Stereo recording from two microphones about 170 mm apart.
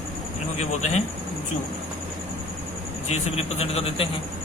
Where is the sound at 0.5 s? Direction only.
45° left (ahead or behind).